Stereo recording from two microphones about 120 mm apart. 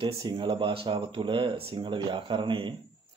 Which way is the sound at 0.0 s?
40° right (ahead or behind).